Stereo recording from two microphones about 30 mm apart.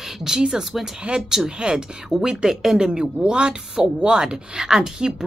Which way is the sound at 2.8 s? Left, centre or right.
Right.